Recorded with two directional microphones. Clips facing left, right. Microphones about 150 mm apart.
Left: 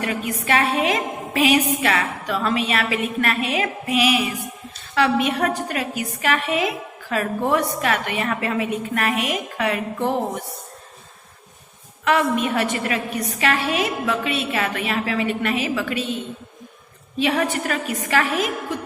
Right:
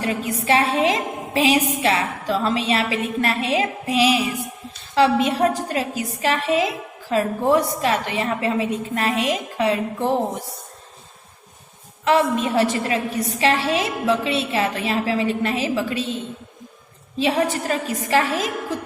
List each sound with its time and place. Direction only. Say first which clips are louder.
0.0 s a woman's voice: right 1 dB; 30° right (ahead or behind)
12.0 s a woman's voice: right 1 dB; 30° right (ahead or behind)
17.2 s a woman's voice: right 1 dB; 30° right (ahead or behind)